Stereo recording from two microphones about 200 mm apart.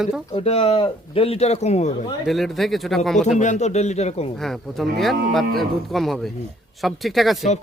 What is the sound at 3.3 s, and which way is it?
Speech, 35° left (ahead or behind).